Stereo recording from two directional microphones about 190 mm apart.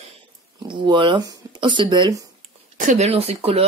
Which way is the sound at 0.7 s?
25° right (ahead or behind).